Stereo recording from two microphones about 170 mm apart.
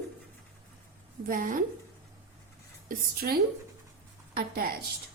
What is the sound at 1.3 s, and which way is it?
Speech, 55° right (ahead or behind).